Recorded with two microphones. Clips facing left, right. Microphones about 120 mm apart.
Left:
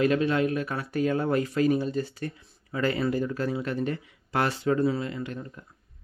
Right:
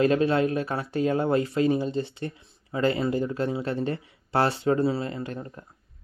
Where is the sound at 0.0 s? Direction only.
35° right (ahead or behind).